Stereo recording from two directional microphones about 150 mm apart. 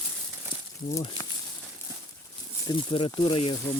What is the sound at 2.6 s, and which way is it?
Speech, 30° left (ahead or behind).